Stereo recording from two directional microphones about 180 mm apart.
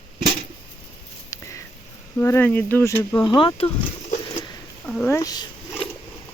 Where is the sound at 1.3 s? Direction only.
15° left (ahead or behind).